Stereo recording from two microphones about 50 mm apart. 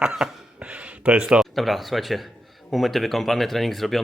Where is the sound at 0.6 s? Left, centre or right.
Right.